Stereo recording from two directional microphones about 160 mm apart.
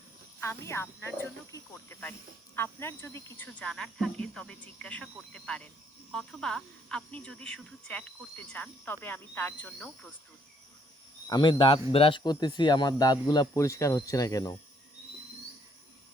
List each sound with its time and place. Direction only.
0.3 s speech: 15° left (ahead or behind)
11.3 s speech: 30° left (ahead or behind)